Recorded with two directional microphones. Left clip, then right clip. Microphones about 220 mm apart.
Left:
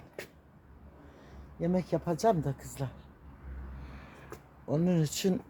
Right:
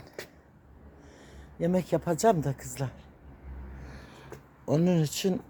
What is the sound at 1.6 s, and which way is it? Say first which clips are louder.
Speech: right 4 dB; 30° right (ahead or behind).